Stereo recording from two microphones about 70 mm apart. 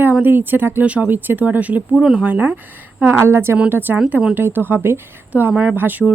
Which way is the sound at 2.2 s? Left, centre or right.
Right.